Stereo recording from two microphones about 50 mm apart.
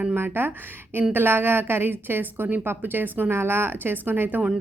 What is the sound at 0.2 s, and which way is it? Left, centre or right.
A woman's voice, right.